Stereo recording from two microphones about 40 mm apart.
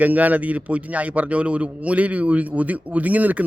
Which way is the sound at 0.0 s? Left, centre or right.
Right.